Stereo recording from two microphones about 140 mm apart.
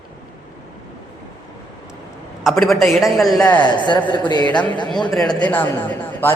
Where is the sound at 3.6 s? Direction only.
35° left (ahead or behind).